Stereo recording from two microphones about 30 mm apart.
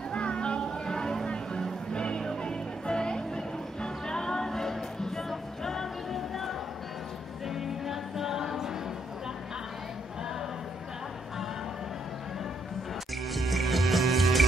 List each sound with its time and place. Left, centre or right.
0.1 s music: left
0.6 s music: left; by 6.5 s centre
7.4 s music: centre
13.3 s music: centre